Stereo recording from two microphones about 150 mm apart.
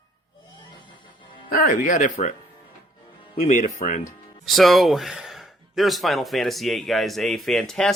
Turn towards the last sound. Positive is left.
turn(degrees=5)  # may be behind; listen again after turning